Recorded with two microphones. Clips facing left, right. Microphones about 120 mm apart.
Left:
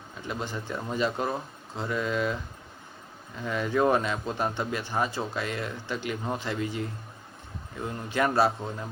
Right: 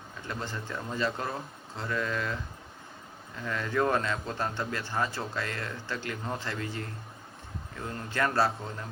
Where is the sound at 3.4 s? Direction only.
15° left (ahead or behind).